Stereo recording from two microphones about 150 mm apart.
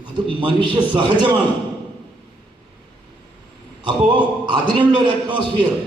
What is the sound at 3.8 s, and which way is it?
A man's voice, 30° right (ahead or behind).